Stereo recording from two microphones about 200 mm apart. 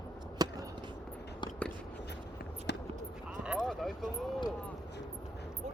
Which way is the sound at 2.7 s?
60° left (ahead or behind).